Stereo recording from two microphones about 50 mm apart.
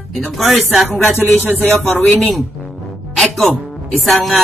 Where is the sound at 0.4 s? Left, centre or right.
Centre.